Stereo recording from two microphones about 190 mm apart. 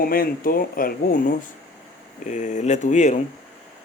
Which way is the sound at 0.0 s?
50° left (ahead or behind).